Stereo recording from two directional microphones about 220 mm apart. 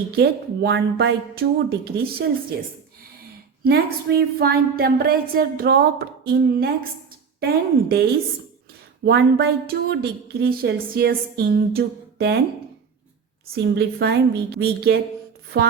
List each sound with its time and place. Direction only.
0.2 s a woman's voice: 50° right (ahead or behind)
3.6 s a woman's voice: 45° right (ahead or behind)
9.0 s a woman's voice: 50° right (ahead or behind)
13.7 s a woman's voice: 50° right (ahead or behind)